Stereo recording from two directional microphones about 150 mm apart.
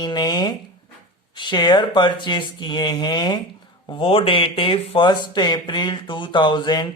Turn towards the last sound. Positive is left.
turn(degrees=30)  # may be behind; listen again after turning